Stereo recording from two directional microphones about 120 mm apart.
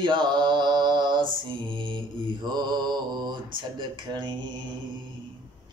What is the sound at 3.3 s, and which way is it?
Speech, 40° right (ahead or behind).